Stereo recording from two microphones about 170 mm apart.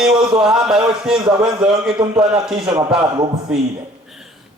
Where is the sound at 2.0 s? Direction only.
25° right (ahead or behind).